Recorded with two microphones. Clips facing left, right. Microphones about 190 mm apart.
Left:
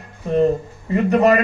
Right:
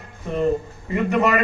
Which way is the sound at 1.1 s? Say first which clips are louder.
Left 5 dB; 35° left (ahead or behind).